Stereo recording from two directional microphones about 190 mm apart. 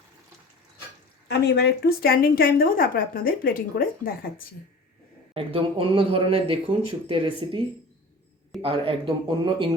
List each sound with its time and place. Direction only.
1.3 s a woman's voice: 60° left (ahead or behind)
5.3 s speech: 30° right (ahead or behind)
8.6 s speech: 30° right (ahead or behind)